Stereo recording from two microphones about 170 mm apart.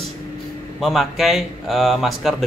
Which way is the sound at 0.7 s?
Centre (ahead or behind).